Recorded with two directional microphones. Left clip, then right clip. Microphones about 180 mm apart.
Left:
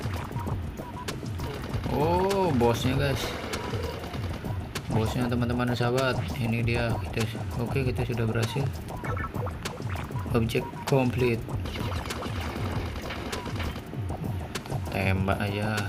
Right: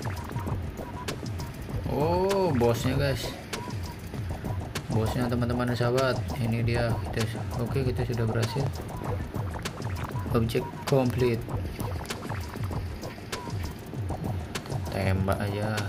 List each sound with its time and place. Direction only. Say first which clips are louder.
1.9 s speech: even; 10° left (ahead or behind)
4.7 s speech: left 1 dB; 5° left (ahead or behind)
10.3 s speech: left 1 dB; 5° left (ahead or behind)
15.0 s speech: left 1 dB; 10° left (ahead or behind)